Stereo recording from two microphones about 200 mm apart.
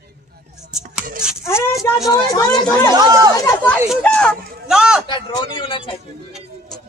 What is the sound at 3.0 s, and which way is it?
Speech, 20° right (ahead or behind).